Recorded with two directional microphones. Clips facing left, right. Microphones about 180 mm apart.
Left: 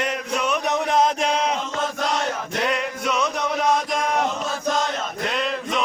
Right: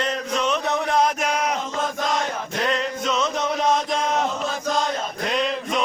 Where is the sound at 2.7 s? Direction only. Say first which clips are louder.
Even; 10° left (ahead or behind).